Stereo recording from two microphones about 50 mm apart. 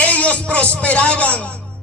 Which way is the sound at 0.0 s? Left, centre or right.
Left.